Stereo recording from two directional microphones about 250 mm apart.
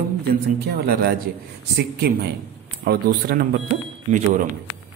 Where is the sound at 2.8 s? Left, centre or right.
Right.